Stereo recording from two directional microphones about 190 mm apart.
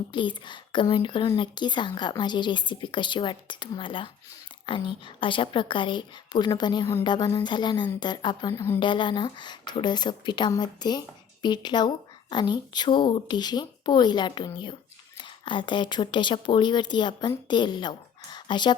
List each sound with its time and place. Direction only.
0.1 s a woman's voice: 25° left (ahead or behind)